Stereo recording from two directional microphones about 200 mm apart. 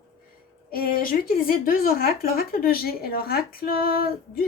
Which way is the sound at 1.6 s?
45° left (ahead or behind).